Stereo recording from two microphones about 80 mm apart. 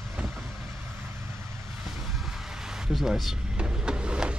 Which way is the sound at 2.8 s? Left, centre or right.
Centre.